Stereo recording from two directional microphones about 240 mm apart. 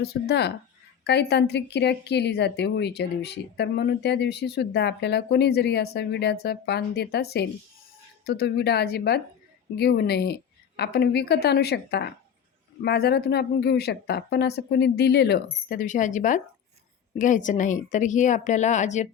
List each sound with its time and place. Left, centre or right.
0.0 s a woman's voice: left